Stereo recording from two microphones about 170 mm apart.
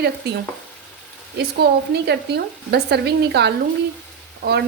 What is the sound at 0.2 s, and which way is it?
Speech, 70° right (ahead or behind).